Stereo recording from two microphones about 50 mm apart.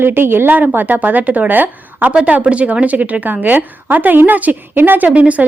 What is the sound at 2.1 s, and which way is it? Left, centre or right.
A woman's voice, right.